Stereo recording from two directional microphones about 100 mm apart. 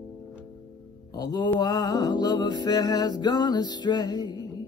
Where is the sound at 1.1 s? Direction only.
40° left (ahead or behind).